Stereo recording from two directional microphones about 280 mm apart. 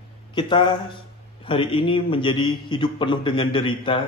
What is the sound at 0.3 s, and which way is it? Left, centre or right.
A man's voice, centre.